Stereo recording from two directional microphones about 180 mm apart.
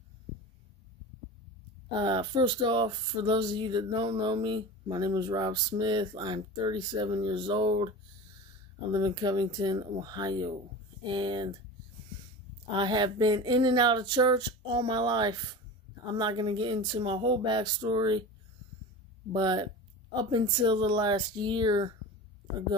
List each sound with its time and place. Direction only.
2.0 s speech: 25° right (ahead or behind)
8.9 s speech: 25° right (ahead or behind)
12.7 s speech: 25° right (ahead or behind)
19.3 s speech: 25° right (ahead or behind)